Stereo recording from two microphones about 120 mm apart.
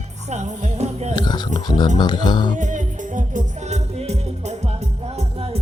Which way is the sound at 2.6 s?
90° right.